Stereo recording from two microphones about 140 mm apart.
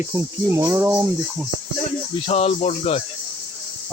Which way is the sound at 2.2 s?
45° left (ahead or behind).